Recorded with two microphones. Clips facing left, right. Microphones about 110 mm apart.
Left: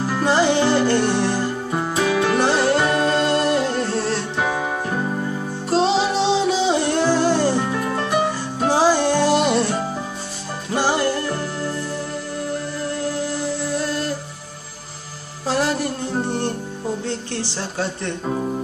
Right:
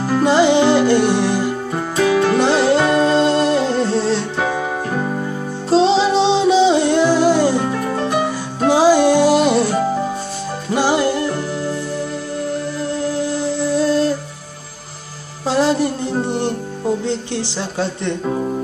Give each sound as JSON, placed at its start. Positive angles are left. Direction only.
{"t": 0.2, "sound": "music", "side_deg": -20}
{"t": 5.7, "sound": "music", "side_deg": -25}
{"t": 10.7, "sound": "music", "side_deg": -15}
{"t": 13.8, "sound": "music", "side_deg": -30}
{"t": 15.4, "sound": "music", "side_deg": -25}